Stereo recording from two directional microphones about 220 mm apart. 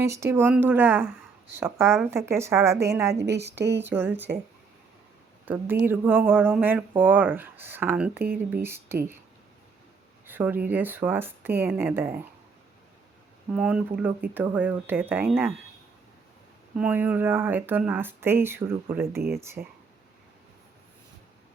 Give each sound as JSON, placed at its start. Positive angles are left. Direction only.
{"t": 0.0, "sound": "speech", "side_deg": -15}
{"t": 3.5, "sound": "speech", "side_deg": -50}
{"t": 3.8, "sound": "speech", "side_deg": -10}
{"t": 5.5, "sound": "speech", "side_deg": -10}
{"t": 8.2, "sound": "speech", "side_deg": -45}
{"t": 8.6, "sound": "speech", "side_deg": -10}
{"t": 10.2, "sound": "speech", "side_deg": -10}
{"t": 13.5, "sound": "speech", "side_deg": -5}
{"t": 16.7, "sound": "speech", "side_deg": -5}